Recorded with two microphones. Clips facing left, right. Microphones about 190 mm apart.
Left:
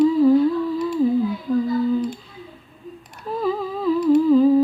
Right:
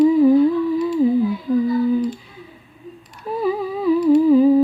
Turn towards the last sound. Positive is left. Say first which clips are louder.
# right 2 dB
turn(degrees=-10)  # may be behind; listen again after turning